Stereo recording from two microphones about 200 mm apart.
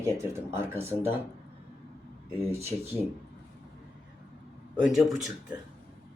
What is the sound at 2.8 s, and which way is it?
Speech, 10° right (ahead or behind).